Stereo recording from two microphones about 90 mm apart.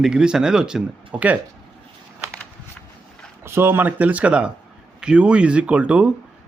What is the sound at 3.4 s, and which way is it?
A man's voice, 25° right (ahead or behind).